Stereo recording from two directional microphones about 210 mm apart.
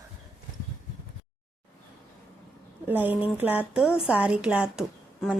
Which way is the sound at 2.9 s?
10° right (ahead or behind).